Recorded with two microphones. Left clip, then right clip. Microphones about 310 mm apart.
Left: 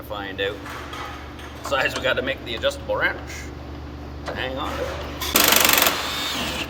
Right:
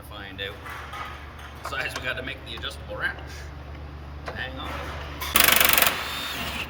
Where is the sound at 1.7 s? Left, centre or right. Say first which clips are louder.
Left 8 dB; centre.